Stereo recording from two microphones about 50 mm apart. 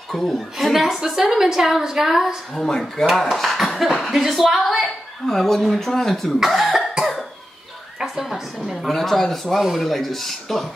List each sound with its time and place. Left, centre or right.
0.1 s speech: centre
2.5 s speech: centre
8.0 s speech: centre